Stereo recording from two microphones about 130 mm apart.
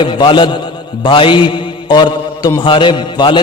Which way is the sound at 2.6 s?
40° left (ahead or behind).